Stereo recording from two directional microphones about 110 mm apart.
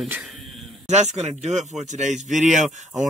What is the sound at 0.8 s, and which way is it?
A man's voice, 90° right.